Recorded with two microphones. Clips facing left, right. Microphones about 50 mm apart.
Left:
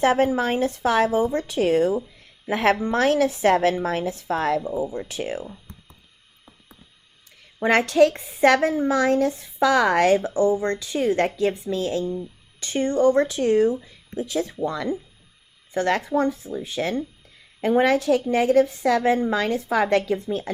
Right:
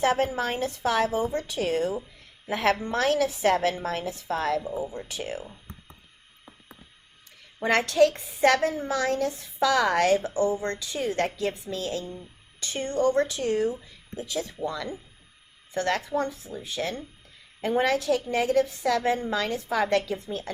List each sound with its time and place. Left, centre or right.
0.0 s a woman's voice: left
7.7 s a woman's voice: left
19.2 s a woman's voice: left